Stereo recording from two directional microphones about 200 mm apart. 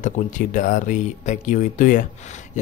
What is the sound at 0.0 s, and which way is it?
Speech, 40° left (ahead or behind).